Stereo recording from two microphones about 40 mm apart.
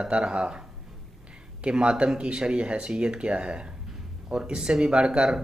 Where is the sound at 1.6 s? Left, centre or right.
Right.